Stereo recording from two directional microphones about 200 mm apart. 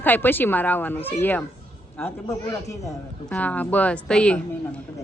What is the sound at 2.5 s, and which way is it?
Speech, 15° left (ahead or behind).